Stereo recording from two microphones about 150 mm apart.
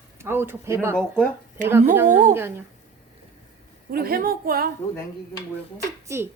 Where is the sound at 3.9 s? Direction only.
80° right.